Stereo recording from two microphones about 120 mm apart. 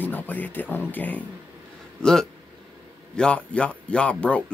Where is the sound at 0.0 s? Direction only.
15° left (ahead or behind).